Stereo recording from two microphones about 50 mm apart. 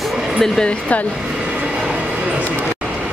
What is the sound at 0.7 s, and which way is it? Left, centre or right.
Speech, left.